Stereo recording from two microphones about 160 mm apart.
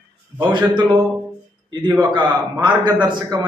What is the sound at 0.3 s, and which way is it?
Speech, 30° right (ahead or behind).